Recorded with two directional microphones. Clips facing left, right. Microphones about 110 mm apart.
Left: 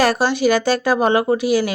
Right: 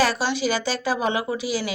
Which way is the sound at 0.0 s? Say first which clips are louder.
Left 6 dB; 50° left (ahead or behind).